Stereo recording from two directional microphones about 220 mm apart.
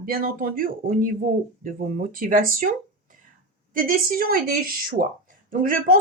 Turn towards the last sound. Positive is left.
turn(degrees=-40)  # may be behind; listen again after turning